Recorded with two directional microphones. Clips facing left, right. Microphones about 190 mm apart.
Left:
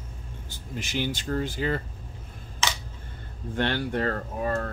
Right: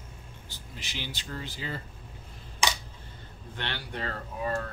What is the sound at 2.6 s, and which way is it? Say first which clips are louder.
Camera: right 1 dB; 15° right (ahead or behind).